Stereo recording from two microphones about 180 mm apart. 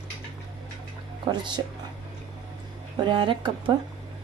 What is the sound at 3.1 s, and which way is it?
Speech, 30° right (ahead or behind).